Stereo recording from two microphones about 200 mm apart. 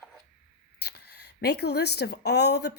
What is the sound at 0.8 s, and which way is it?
Speech, 55° left (ahead or behind).